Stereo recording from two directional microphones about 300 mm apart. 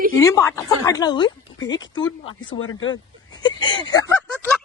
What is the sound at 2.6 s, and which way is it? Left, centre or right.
Speech, left.